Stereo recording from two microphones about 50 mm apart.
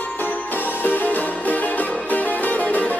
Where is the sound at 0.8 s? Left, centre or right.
Left.